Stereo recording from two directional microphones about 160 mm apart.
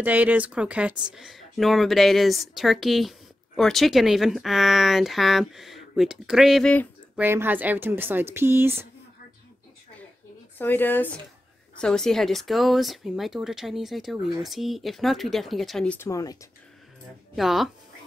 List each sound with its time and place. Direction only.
0.0 s speech: 10° right (ahead or behind); by 6.9 s 5° left (ahead or behind)
7.2 s speech: 15° right (ahead or behind)
10.6 s speech: 10° left (ahead or behind)
16.1 s speech: 20° left (ahead or behind)
17.4 s speech: centre (ahead or behind)